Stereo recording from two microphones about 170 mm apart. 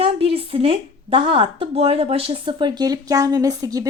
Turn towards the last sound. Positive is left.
turn(degrees=-20)  # may be behind; listen again after turning